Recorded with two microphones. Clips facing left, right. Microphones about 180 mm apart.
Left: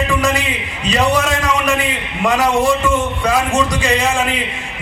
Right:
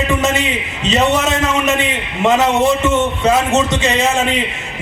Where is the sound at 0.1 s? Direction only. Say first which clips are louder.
Right 1 dB; 25° right (ahead or behind).